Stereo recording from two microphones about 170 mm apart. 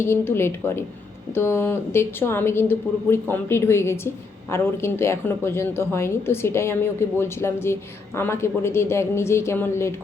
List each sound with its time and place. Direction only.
0.0 s a woman's voice: 15° left (ahead or behind)